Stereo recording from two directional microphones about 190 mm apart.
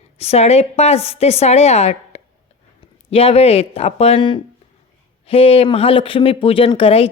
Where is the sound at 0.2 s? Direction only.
35° left (ahead or behind).